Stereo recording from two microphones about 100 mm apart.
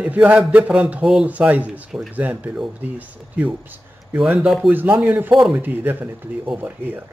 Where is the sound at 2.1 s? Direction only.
15° right (ahead or behind).